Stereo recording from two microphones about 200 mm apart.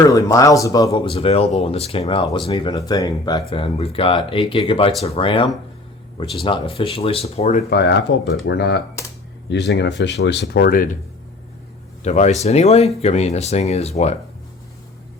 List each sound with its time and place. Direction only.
0.1 s speech: 15° left (ahead or behind); by 7.6 s 30° left (ahead or behind)
7.7 s speech: 60° left (ahead or behind)
12.0 s speech: 35° left (ahead or behind)